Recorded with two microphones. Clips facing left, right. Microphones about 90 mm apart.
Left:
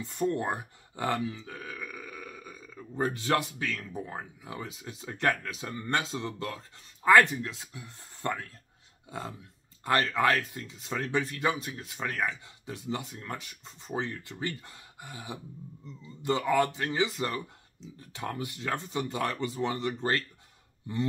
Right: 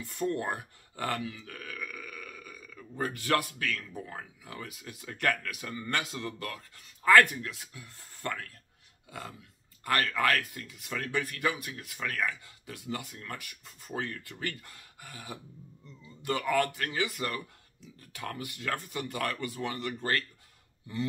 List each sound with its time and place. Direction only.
0.0 s speech: 20° left (ahead or behind)